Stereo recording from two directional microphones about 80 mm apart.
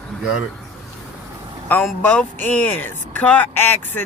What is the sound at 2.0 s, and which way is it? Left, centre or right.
Speech, centre.